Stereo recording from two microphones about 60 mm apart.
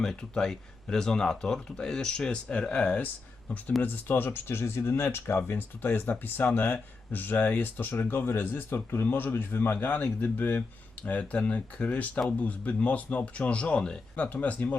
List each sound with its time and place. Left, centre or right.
0.0 s speech: centre
3.8 s speech: left